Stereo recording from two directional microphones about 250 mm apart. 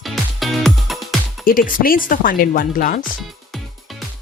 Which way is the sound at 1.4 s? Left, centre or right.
Left.